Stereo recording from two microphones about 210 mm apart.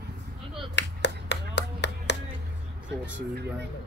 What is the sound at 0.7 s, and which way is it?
Finger snapping, 55° left (ahead or behind).